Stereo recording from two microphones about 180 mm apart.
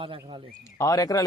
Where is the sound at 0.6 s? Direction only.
20° left (ahead or behind).